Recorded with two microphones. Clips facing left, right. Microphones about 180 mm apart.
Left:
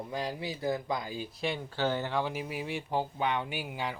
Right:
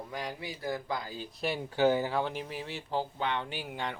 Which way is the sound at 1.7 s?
15° right (ahead or behind).